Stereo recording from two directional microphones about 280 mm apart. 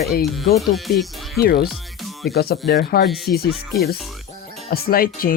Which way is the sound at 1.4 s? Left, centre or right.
Left.